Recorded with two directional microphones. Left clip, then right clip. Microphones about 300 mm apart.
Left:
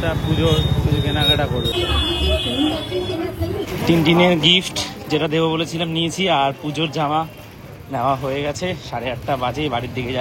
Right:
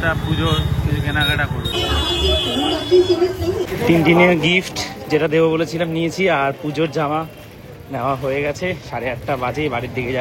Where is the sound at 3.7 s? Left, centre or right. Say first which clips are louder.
Right 2 dB; centre.